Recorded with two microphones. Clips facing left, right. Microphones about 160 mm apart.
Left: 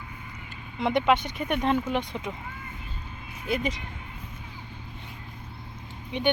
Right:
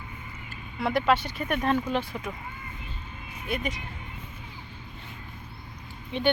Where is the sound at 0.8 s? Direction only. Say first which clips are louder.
Left 1 dB; 20° left (ahead or behind).